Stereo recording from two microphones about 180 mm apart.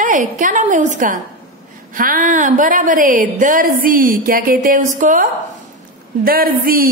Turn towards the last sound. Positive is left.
turn(degrees=-55)  # may be behind; listen again after turning